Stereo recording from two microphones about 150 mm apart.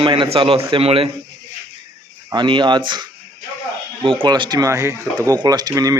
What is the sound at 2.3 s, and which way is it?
Speech, 30° right (ahead or behind).